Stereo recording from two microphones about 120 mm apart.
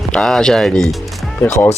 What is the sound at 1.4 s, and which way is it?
Speech, 25° left (ahead or behind).